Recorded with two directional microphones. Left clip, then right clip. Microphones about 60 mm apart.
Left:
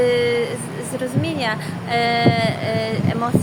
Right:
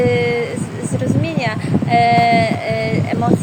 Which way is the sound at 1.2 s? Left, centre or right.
Left.